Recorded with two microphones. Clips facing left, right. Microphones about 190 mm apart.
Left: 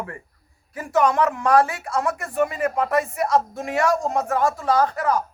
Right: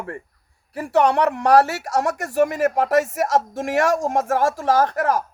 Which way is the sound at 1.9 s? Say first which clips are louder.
Right 3 dB; 80° right.